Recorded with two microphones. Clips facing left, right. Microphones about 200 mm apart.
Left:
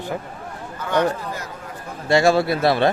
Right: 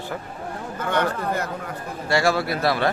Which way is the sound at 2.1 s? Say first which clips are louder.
Left 5 dB; 25° left (ahead or behind).